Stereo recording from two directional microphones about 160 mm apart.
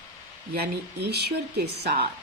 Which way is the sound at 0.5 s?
80° right.